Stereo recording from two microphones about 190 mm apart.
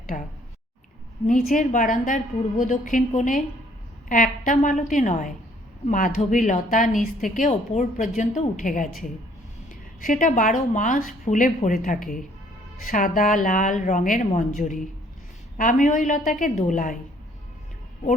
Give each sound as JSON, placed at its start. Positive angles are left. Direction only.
{"t": 0.1, "sound": "speech", "side_deg": 40}
{"t": 1.3, "sound": "speech", "side_deg": 45}